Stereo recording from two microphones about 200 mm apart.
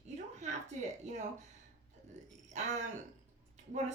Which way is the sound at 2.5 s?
35° right (ahead or behind).